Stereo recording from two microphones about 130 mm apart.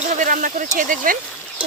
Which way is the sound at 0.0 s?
85° right.